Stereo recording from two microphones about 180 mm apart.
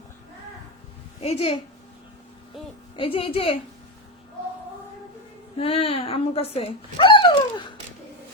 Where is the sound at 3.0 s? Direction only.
30° left (ahead or behind).